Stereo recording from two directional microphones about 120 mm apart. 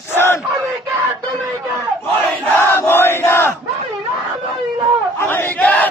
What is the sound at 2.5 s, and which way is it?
Battle cry, 20° left (ahead or behind).